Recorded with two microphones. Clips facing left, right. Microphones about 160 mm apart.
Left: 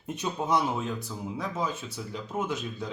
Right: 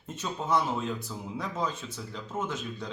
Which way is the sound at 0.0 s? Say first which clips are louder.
Left 3 dB; 15° left (ahead or behind).